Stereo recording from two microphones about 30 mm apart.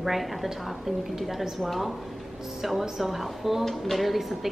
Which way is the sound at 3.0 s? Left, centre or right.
Centre.